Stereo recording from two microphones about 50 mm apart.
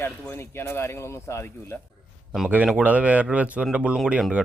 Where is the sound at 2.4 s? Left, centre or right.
Right.